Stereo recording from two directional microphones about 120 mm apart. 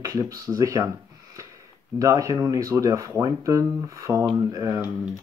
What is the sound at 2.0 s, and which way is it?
Speech, 25° right (ahead or behind).